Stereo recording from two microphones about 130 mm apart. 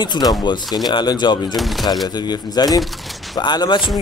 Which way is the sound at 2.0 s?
30° left (ahead or behind).